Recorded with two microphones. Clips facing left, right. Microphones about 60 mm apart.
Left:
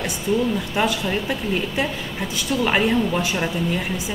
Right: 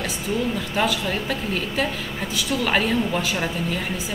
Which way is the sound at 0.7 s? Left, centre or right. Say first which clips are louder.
Even; centre.